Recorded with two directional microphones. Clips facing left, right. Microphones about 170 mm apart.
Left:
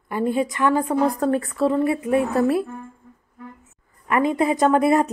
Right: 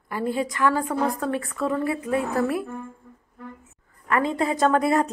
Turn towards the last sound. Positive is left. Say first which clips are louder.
# left 3 dB
turn(degrees=20)  # may be behind; listen again after turning